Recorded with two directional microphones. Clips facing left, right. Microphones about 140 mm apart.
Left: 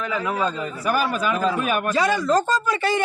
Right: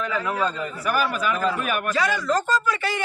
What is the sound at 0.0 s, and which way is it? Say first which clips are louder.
A man's voice: left 1 dB; 15° left (ahead or behind).